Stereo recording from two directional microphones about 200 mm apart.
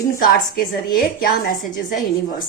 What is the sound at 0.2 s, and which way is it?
A woman's voice, 50° left (ahead or behind).